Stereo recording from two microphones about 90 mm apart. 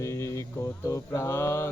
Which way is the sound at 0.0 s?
30° left (ahead or behind).